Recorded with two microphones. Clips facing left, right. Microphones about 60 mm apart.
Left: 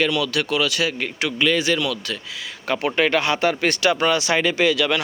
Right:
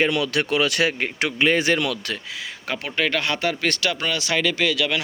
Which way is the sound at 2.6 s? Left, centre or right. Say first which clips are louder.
Left 5 dB; centre.